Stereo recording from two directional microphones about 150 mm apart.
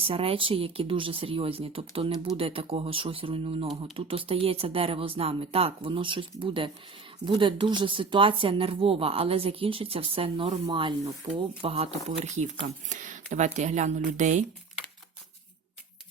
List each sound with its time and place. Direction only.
0.0 s speech: 40° right (ahead or behind)